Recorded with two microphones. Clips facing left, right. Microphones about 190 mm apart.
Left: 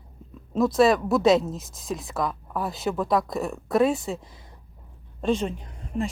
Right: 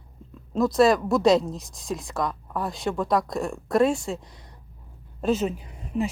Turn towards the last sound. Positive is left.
turn(degrees=-5)  # may be behind; listen again after turning